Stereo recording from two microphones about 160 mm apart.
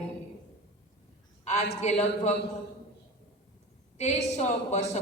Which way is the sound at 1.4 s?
45° left (ahead or behind).